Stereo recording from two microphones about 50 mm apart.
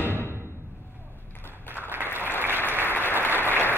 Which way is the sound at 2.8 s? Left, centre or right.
Left.